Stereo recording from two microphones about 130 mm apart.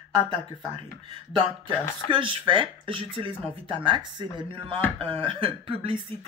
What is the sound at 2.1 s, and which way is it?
Speech, 40° right (ahead or behind).